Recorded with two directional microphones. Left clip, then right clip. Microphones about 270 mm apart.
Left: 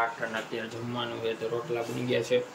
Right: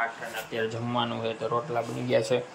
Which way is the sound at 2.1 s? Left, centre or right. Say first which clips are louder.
Right 1 dB; centre.